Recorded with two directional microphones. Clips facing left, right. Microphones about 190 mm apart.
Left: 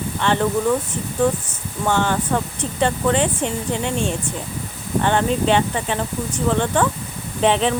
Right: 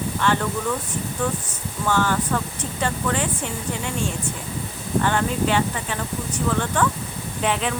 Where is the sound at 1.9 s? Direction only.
20° left (ahead or behind).